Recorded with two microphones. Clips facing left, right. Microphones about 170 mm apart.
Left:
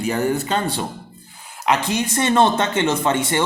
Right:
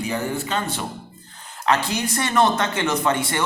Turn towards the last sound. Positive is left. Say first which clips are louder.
# left 2 dB
turn(degrees=25)  # may be behind; listen again after turning